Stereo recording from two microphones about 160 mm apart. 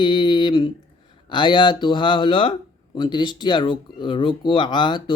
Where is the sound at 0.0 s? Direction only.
30° left (ahead or behind).